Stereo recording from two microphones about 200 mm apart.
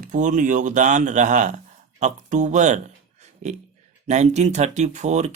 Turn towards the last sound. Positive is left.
turn(degrees=-35)  # may be behind; listen again after turning